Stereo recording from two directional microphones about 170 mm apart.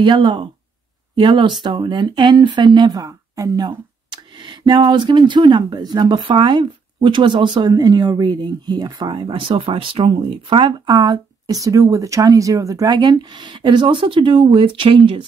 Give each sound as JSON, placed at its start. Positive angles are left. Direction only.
{"t": 0.0, "sound": "speech", "side_deg": -30}